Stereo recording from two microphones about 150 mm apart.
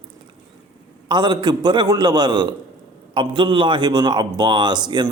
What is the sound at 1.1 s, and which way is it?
A man's voice, 30° right (ahead or behind).